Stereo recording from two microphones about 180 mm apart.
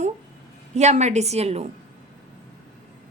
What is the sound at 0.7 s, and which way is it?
Speech, 40° right (ahead or behind).